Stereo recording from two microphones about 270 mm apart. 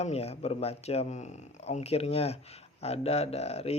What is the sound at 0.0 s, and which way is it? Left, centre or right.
Speech, left.